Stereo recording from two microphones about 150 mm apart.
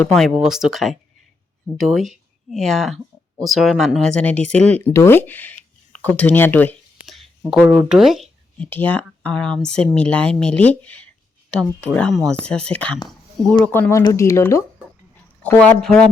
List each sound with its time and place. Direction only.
0.0 s speech: centre (ahead or behind)
7.1 s speech: centre (ahead or behind)
8.5 s speech: 10° left (ahead or behind)